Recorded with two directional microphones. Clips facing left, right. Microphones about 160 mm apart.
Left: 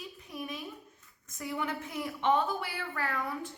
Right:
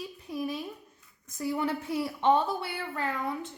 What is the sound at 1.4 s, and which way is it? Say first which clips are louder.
A woman's voice: right 5 dB; 35° right (ahead or behind).